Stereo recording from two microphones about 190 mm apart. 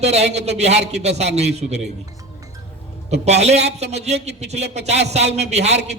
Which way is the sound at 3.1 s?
35° right (ahead or behind).